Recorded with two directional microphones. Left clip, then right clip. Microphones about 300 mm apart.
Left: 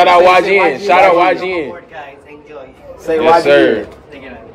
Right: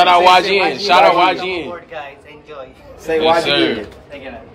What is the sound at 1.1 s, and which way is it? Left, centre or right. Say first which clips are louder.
Speech: left 3 dB; right.